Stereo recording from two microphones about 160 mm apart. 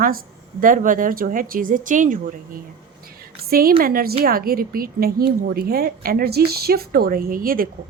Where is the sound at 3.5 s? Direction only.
65° right (ahead or behind).